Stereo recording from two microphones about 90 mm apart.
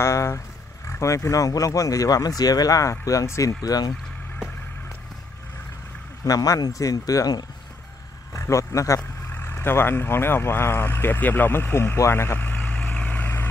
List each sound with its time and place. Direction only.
0.0 s speech: 30° left (ahead or behind)
6.2 s speech: 40° left (ahead or behind)
9.3 s speech: 25° left (ahead or behind)